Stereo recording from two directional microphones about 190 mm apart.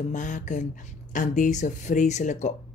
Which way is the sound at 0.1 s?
40° left (ahead or behind).